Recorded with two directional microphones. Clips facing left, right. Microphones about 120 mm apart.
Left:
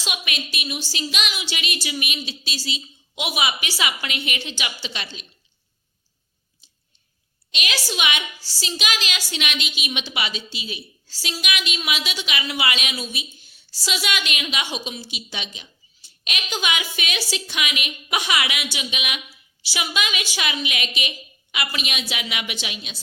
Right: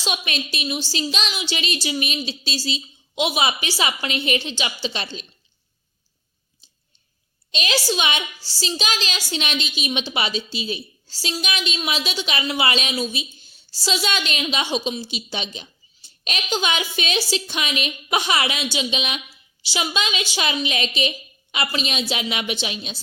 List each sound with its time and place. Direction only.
0.0 s a woman's voice: 30° right (ahead or behind)
6.6 s a sound: 30° right (ahead or behind)
7.5 s a woman's voice: 30° right (ahead or behind)